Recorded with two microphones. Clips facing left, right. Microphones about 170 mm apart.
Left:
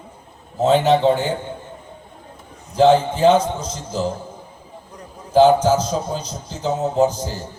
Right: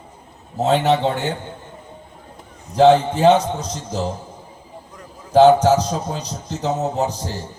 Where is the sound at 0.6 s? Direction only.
65° right (ahead or behind).